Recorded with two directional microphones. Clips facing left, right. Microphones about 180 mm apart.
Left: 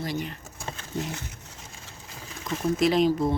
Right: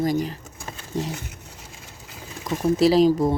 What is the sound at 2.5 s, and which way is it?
Speech, 40° right (ahead or behind).